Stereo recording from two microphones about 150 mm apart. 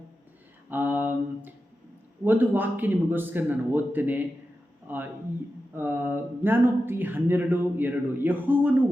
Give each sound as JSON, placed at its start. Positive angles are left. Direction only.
{"t": 0.7, "sound": "speech", "side_deg": -10}